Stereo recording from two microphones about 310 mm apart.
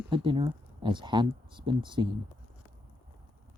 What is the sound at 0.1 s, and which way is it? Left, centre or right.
Speech, centre.